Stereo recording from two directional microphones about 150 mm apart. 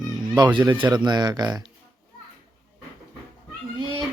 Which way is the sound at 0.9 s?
30° right (ahead or behind).